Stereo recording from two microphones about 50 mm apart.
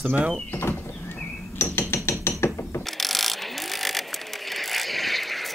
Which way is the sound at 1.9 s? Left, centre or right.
Left.